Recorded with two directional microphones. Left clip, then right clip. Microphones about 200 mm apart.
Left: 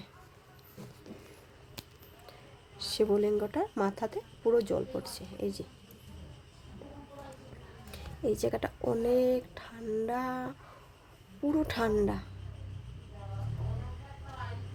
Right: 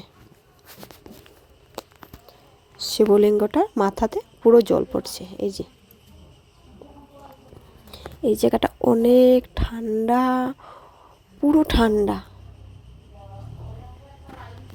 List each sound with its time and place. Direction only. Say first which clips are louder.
2.7 s speech: right 12 dB; 30° right (ahead or behind)
8.2 s speech: right 12 dB; 35° right (ahead or behind)